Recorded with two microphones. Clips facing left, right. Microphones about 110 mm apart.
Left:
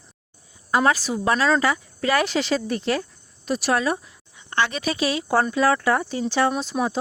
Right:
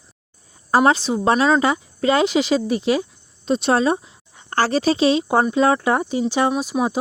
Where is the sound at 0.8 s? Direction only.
25° right (ahead or behind).